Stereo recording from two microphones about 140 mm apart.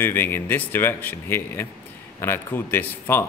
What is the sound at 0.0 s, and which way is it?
Speech, 15° left (ahead or behind).